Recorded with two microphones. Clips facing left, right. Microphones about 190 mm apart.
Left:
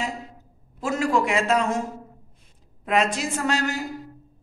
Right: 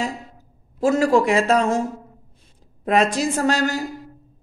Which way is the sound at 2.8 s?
40° right (ahead or behind).